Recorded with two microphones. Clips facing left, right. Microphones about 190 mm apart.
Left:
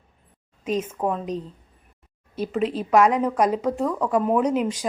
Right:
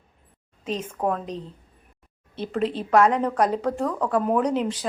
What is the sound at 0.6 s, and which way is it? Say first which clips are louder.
A woman's voice: left 2 dB; 10° left (ahead or behind).